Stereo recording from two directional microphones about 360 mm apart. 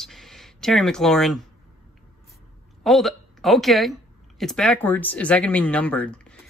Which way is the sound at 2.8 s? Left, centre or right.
Centre.